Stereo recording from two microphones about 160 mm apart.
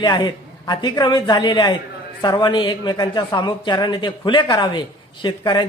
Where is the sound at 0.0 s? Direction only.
25° left (ahead or behind).